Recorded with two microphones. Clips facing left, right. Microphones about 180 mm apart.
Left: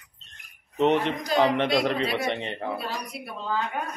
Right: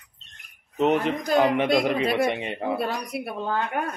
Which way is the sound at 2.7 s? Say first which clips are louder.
Right 5 dB; 55° right (ahead or behind).